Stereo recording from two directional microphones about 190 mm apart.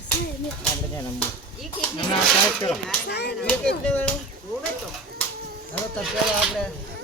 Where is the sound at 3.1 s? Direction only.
60° left (ahead or behind).